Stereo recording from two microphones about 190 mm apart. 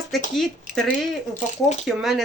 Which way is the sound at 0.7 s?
40° left (ahead or behind).